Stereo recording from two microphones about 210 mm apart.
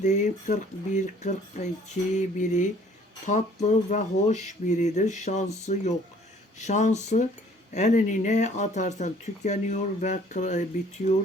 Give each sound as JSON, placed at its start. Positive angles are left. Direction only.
{"t": 0.0, "sound": "speech", "side_deg": 35}